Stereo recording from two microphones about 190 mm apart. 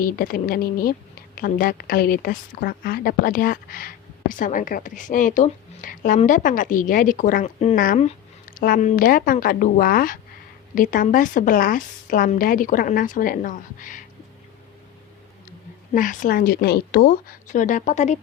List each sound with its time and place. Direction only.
0.0 s a woman's voice: 50° left (ahead or behind)
16.0 s a woman's voice: 45° left (ahead or behind)